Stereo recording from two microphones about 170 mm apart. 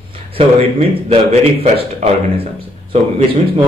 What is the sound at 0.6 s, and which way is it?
Speech, 40° right (ahead or behind).